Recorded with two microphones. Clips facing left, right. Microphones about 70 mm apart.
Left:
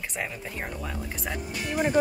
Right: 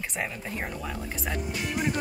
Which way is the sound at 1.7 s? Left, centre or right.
Left.